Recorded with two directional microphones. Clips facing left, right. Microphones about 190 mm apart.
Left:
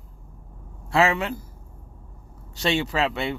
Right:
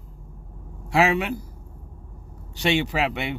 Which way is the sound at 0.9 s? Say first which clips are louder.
Right 1 dB; 15° right (ahead or behind).